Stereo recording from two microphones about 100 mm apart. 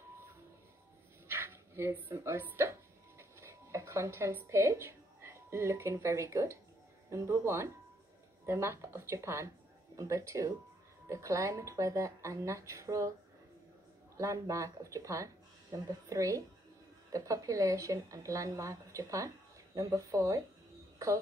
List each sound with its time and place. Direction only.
1.2 s dog: 25° right (ahead or behind)
2.4 s a woman's voice: 25° right (ahead or behind)
14.1 s a woman's voice: 30° right (ahead or behind)